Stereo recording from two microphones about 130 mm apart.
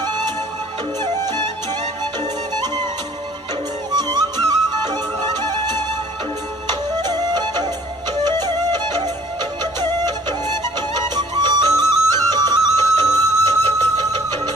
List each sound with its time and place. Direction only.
0.0 s music: 35° right (ahead or behind)
3.9 s music: 30° right (ahead or behind)